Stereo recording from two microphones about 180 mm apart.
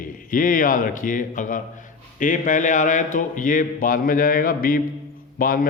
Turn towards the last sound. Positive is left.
turn(degrees=50)  # may be behind; listen again after turning